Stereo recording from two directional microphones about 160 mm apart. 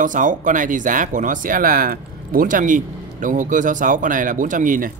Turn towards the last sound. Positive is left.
turn(degrees=-55)  # may be behind; listen again after turning